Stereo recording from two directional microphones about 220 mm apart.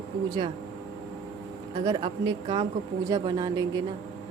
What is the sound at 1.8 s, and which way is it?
A woman's voice, 25° right (ahead or behind).